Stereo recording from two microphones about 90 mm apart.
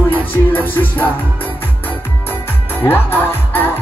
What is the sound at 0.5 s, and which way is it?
Music, 20° left (ahead or behind).